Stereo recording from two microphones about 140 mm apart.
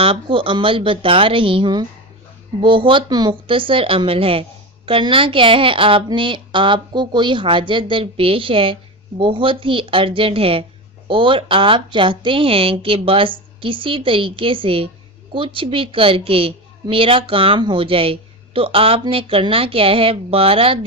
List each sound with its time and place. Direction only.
0.0 s a woman's voice: 40° right (ahead or behind)